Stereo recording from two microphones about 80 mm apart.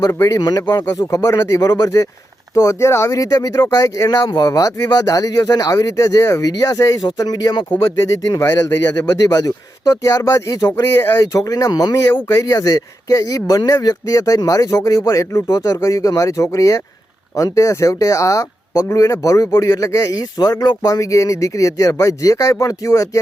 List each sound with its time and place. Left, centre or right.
0.1 s speech: left
0.3 s speech: left
0.9 s speech: left
4.3 s speech: left
8.4 s speech: left
9.8 s speech: left
10.6 s speech: left
11.2 s speech: left
20.5 s speech: left